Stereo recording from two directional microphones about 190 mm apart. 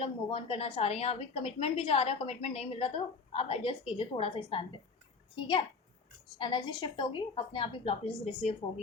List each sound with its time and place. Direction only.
0.0 s a woman's voice: 30° left (ahead or behind)